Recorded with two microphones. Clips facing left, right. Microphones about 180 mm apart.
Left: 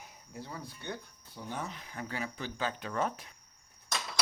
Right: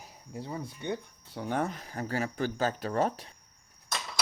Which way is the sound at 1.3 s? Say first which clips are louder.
Right 9 dB; 65° right (ahead or behind).